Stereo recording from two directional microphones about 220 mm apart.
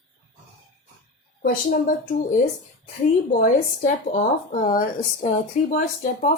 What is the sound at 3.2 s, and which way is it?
Speech, 40° left (ahead or behind).